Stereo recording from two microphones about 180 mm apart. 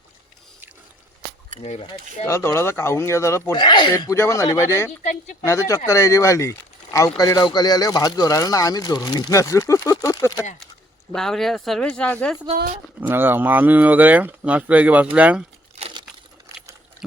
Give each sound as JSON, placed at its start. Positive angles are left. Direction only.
{"t": 1.5, "sound": "speech", "side_deg": -45}
{"t": 1.9, "sound": "speech", "side_deg": 15}
{"t": 3.6, "sound": "speech", "side_deg": 25}
{"t": 11.1, "sound": "speech", "side_deg": 5}
{"t": 13.0, "sound": "speech", "side_deg": -10}